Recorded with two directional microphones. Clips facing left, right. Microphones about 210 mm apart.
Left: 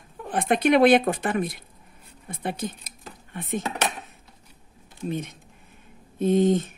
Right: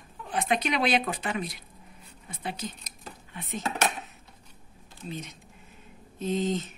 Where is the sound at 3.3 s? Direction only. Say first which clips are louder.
Left 7 dB; 55° left (ahead or behind).